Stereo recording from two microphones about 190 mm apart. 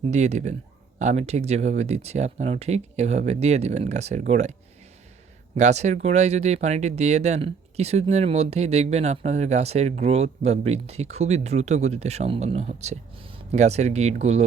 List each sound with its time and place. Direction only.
0.1 s speech: 35° right (ahead or behind)
5.5 s speech: 35° right (ahead or behind)